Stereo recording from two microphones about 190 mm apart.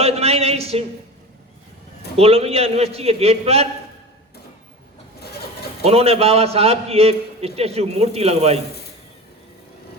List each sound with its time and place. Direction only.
0.0 s a sound: 30° right (ahead or behind)
2.1 s a man's voice: 30° right (ahead or behind)
5.8 s a man's voice: 30° right (ahead or behind)